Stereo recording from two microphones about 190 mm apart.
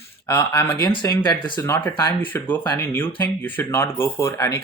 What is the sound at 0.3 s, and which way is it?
Speech, 15° left (ahead or behind).